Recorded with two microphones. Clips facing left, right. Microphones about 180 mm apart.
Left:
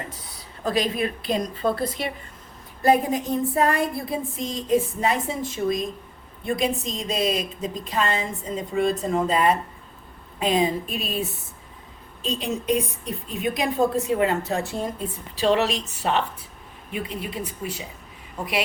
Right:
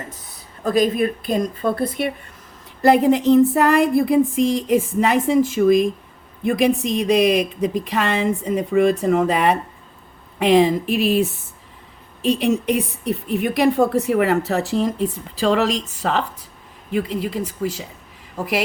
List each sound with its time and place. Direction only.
0.6 s a woman's voice: 45° right (ahead or behind)
2.8 s a woman's voice: 75° right (ahead or behind)
6.6 s a woman's voice: 70° right (ahead or behind); by 17.7 s 90° right